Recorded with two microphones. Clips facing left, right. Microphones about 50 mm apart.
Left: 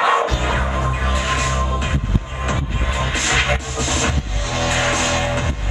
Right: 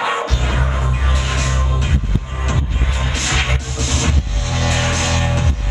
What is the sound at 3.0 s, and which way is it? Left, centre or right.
Music, centre.